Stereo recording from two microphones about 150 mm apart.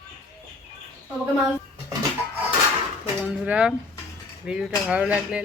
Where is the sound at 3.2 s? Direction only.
10° right (ahead or behind).